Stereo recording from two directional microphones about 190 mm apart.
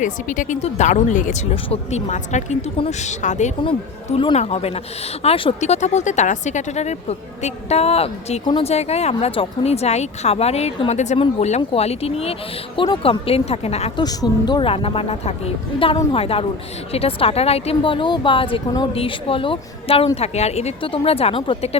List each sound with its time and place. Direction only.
0.0 s speech: 40° left (ahead or behind)
3.6 s speech: 25° left (ahead or behind)
14.0 s speech: 20° left (ahead or behind)